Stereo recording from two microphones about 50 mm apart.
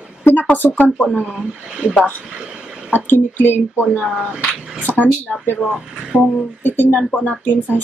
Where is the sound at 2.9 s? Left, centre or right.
Left.